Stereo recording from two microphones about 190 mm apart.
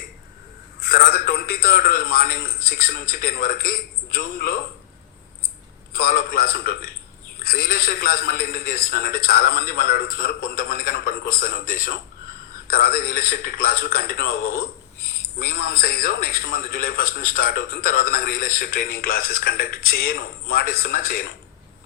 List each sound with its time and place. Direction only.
0.8 s a man's voice: 50° left (ahead or behind)
5.9 s a man's voice: 50° left (ahead or behind)